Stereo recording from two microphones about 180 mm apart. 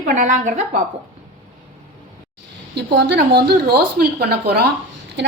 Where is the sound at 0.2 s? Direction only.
45° right (ahead or behind).